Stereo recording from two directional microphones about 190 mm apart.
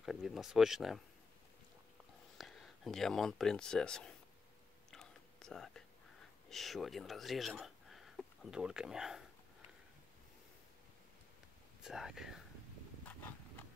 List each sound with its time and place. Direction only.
0.0 s speech: centre (ahead or behind)
2.3 s speech: centre (ahead or behind)
4.9 s whispering: centre (ahead or behind)
6.5 s speech: centre (ahead or behind)
11.8 s speech: 5° right (ahead or behind)
13.1 s a sound: 10° left (ahead or behind)